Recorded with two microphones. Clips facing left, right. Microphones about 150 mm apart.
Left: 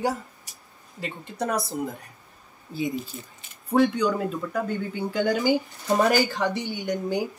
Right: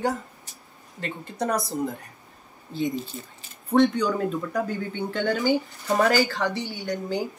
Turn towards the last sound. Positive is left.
turn(degrees=15)  # may be behind; listen again after turning